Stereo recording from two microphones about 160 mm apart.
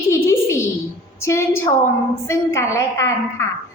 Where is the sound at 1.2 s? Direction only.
15° left (ahead or behind).